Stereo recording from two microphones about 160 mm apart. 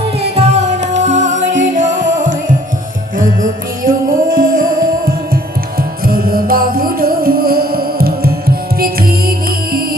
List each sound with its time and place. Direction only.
0.3 s music: 40° right (ahead or behind); by 9.8 s 70° right (ahead or behind)